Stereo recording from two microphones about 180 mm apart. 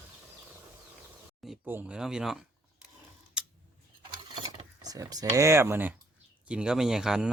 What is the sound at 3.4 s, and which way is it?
Scissors, 5° right (ahead or behind).